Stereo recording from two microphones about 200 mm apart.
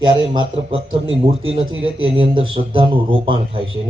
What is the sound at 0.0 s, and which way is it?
Speech, 25° right (ahead or behind).